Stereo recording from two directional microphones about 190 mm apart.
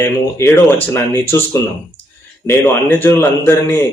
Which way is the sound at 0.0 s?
15° left (ahead or behind).